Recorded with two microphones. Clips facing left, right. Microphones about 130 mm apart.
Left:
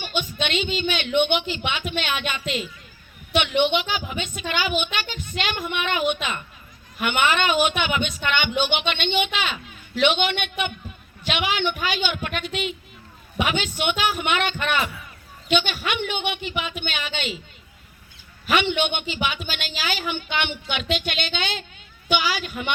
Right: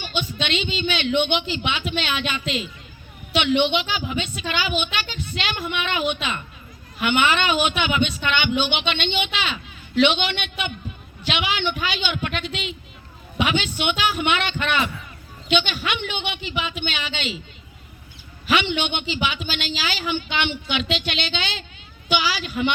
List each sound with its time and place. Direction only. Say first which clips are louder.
0.0 s a woman's voice: even; 50° left (ahead or behind)
3.3 s a woman's voice: right 1 dB; 45° left (ahead or behind)
18.4 s a woman's voice: even; 45° left (ahead or behind)